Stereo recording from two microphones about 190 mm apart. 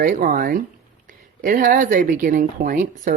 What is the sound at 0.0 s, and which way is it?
Speech, 50° right (ahead or behind).